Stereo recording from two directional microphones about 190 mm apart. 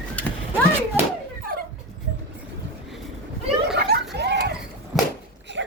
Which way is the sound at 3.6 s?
55° right (ahead or behind).